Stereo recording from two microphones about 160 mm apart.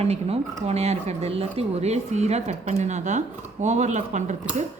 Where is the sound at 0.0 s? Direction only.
40° right (ahead or behind).